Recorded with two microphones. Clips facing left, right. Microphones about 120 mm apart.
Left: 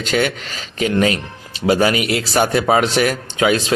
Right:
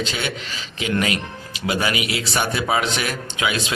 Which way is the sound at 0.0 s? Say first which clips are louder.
Left 7 dB; 50° left (ahead or behind).